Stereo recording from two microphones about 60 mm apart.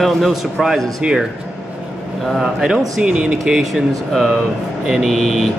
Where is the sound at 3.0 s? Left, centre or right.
Centre.